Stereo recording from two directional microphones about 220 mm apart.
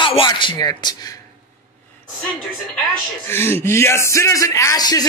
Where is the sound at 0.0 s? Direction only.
20° left (ahead or behind).